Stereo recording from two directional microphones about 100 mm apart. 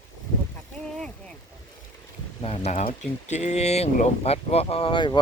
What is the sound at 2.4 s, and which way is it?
Speech, 80° left.